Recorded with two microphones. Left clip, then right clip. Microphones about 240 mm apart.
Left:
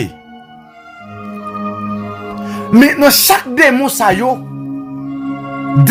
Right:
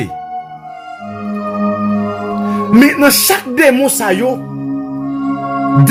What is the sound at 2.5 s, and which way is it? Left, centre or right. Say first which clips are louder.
Music: even; left.